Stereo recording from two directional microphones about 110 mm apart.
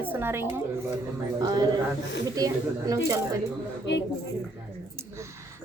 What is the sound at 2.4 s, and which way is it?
Speech, 35° right (ahead or behind).